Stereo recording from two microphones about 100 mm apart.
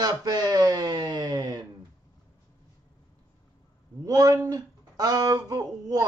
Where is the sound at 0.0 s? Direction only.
40° right (ahead or behind).